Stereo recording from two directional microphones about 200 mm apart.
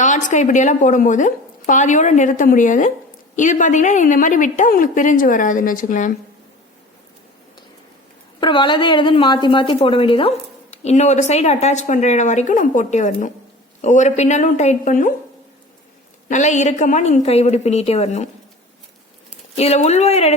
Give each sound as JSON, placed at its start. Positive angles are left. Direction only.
{"t": 0.0, "sound": "a woman's voice", "side_deg": 40}
{"t": 8.4, "sound": "a woman's voice", "side_deg": 25}
{"t": 16.3, "sound": "a woman's voice", "side_deg": 35}
{"t": 19.5, "sound": "a woman's voice", "side_deg": 30}